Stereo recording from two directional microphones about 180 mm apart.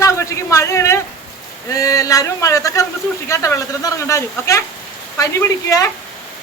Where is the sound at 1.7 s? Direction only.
20° left (ahead or behind).